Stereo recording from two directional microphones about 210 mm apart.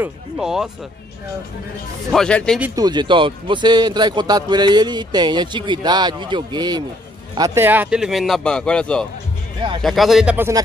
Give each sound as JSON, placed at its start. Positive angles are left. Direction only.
{"t": 0.0, "sound": "speech", "side_deg": 0}
{"t": 2.1, "sound": "speech", "side_deg": 5}
{"t": 2.6, "sound": "speech", "side_deg": -15}